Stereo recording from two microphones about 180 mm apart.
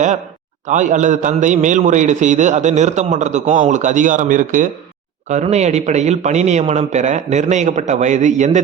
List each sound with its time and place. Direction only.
0.7 s a man's voice: 45° right (ahead or behind)